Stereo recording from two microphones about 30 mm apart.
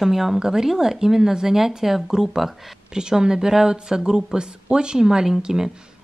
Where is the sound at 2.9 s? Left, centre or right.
Right.